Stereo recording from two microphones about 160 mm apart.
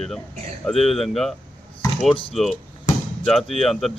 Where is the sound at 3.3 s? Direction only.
Centre (ahead or behind).